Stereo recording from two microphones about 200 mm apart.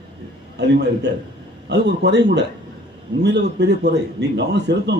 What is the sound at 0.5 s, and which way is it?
A man's voice, 60° right (ahead or behind).